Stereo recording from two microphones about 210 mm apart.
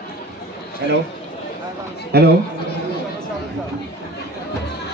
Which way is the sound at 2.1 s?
50° right (ahead or behind).